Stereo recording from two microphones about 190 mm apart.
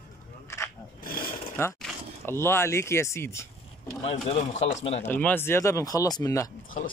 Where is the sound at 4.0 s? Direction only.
35° left (ahead or behind).